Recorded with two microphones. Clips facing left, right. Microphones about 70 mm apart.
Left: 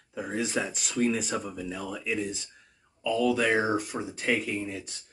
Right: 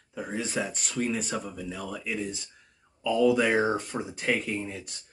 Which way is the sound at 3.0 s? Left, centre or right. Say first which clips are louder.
Right 2 dB; centre.